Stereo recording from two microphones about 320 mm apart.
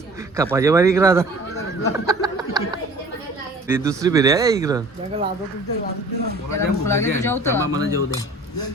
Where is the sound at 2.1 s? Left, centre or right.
Centre.